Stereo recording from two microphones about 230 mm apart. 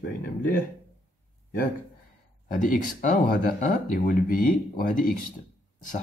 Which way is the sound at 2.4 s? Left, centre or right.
Left.